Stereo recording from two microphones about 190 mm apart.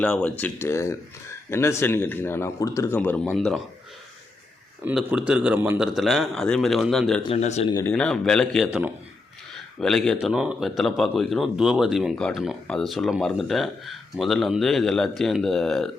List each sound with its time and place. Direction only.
0.0 s speech: 5° left (ahead or behind)
4.9 s speech: 5° right (ahead or behind)
7.3 s speech: 35° left (ahead or behind)
7.7 s speech: 15° left (ahead or behind)
7.9 s speech: 5° left (ahead or behind)